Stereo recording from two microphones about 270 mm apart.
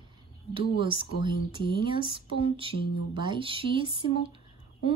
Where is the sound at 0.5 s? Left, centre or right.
Centre.